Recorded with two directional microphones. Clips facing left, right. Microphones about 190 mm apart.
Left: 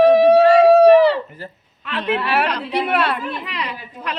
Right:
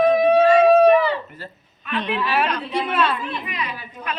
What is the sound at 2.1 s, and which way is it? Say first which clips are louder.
A woman's voice: left 3 dB; 70° left (ahead or behind).